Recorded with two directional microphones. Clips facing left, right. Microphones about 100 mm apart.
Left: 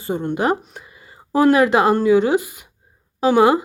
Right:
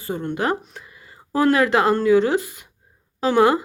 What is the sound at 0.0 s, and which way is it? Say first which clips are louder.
A woman's voice: left 3 dB; 20° left (ahead or behind).